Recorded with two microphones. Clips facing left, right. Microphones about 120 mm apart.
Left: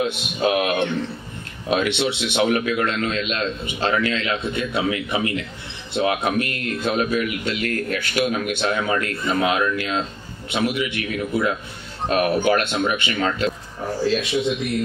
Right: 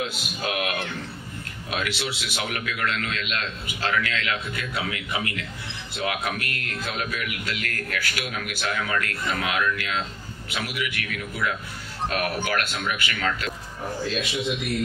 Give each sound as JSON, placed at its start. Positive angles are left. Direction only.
{"t": 0.0, "sound": "speech", "side_deg": 25}